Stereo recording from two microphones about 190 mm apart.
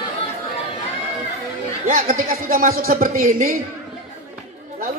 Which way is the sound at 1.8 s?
45° right (ahead or behind).